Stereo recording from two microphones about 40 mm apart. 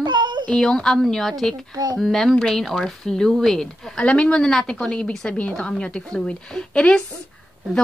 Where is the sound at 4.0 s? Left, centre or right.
Left.